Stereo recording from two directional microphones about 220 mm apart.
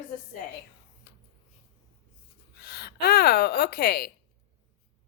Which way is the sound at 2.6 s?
50° left (ahead or behind).